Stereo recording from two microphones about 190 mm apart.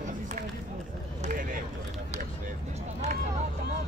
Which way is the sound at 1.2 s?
45° right (ahead or behind).